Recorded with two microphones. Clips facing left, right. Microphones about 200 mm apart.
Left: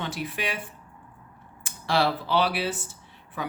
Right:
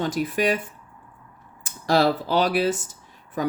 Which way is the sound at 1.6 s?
40° right (ahead or behind).